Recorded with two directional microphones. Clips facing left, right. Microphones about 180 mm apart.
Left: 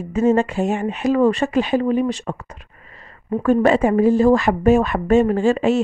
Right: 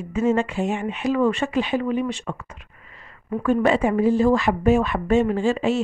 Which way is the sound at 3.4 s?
45° left (ahead or behind).